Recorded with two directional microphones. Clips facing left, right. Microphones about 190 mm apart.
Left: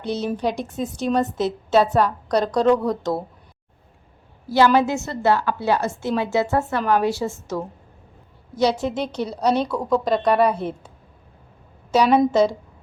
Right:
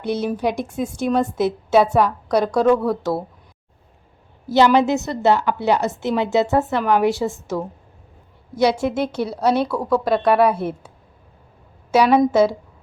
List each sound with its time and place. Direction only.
0.0 s a woman's voice: 10° right (ahead or behind)
4.4 s a woman's voice: 20° right (ahead or behind)